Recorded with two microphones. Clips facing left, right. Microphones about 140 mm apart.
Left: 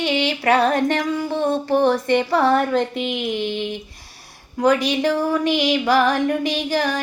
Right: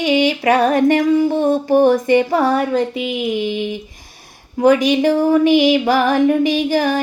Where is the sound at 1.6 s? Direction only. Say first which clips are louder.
Right 5 dB; 15° right (ahead or behind).